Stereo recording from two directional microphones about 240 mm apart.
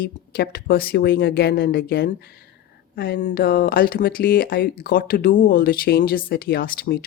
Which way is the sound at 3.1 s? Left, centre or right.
Left.